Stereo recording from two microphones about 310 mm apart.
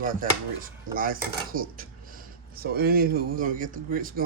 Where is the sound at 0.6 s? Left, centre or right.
Right.